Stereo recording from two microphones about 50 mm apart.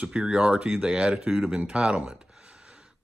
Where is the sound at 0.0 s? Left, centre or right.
Centre.